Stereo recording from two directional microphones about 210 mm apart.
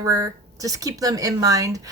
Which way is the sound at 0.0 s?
15° right (ahead or behind).